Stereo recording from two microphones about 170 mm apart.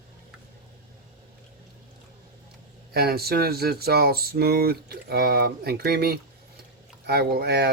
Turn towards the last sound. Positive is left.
turn(degrees=-70)  # may be behind; listen again after turning